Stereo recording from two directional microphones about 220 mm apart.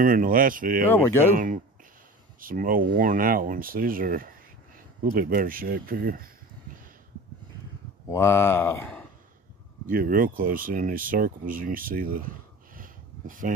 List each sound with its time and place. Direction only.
0.0 s speech: 40° right (ahead or behind)
0.9 s speech: 10° left (ahead or behind)
1.3 s speech: 35° right (ahead or behind)
8.1 s speech: 10° left (ahead or behind)
9.8 s speech: 40° right (ahead or behind)